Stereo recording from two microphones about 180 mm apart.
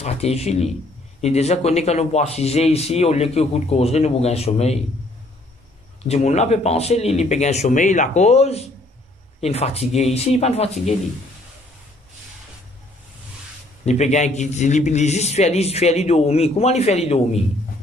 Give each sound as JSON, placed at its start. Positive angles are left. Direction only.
{"t": 0.0, "sound": "speech", "side_deg": 35}
{"t": 6.0, "sound": "speech", "side_deg": 35}
{"t": 13.8, "sound": "speech", "side_deg": 40}